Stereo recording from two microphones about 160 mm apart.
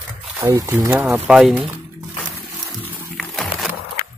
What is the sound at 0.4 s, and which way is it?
Speech, 15° right (ahead or behind).